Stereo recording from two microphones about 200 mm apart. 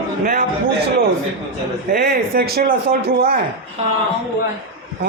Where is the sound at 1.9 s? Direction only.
50° right (ahead or behind).